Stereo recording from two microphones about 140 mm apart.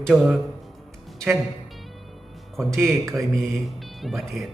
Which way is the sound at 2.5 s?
Centre (ahead or behind).